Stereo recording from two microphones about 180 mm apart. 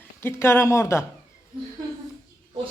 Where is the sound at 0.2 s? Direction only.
15° left (ahead or behind).